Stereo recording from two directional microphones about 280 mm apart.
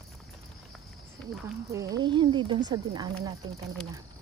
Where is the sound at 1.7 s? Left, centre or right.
Centre.